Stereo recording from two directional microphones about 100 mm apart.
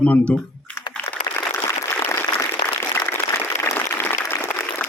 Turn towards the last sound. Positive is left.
turn(degrees=20)  # may be behind; listen again after turning